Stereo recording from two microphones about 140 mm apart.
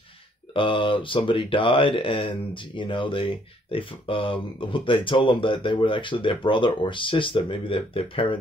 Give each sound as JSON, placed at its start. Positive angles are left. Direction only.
{"t": 0.6, "sound": "speech", "side_deg": 40}